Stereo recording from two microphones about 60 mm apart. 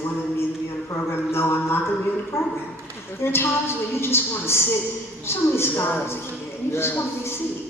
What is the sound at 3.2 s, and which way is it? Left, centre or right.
A woman's voice, left.